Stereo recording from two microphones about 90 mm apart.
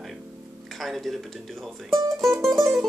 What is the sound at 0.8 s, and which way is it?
Tick-tock, centre (ahead or behind).